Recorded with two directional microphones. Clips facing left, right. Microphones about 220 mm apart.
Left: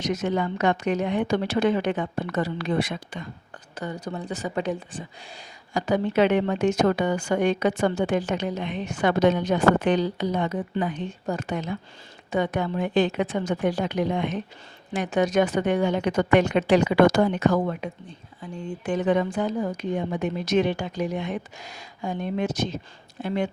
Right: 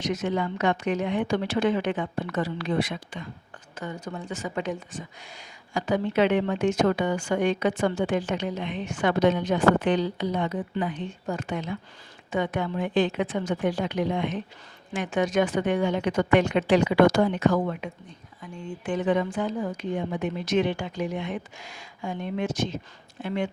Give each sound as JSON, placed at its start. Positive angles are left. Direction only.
{"t": 0.0, "sound": "a woman's voice", "side_deg": 40}